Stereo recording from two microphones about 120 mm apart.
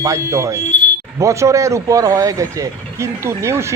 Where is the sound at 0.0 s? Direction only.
25° right (ahead or behind).